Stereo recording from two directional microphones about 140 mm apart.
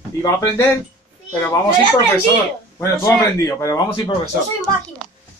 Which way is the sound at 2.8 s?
25° left (ahead or behind).